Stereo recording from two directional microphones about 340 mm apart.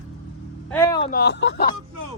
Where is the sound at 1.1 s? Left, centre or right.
Left.